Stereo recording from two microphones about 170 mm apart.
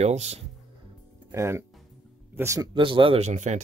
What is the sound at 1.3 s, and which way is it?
Speech, 15° right (ahead or behind).